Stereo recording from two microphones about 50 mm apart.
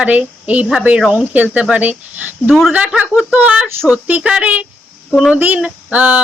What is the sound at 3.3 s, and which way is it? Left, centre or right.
Speech, right.